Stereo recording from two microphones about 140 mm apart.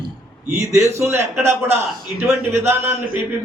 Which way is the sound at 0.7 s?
20° right (ahead or behind).